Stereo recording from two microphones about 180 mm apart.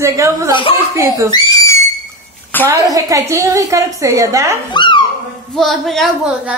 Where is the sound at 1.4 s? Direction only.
15° left (ahead or behind).